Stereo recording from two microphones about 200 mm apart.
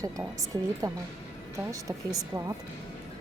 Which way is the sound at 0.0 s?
15° right (ahead or behind).